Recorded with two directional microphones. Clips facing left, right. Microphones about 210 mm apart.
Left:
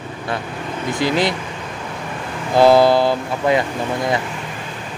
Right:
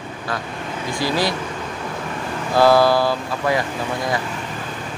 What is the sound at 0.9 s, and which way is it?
Speech, 20° left (ahead or behind).